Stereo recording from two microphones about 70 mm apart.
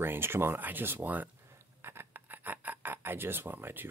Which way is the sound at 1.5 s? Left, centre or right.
Right.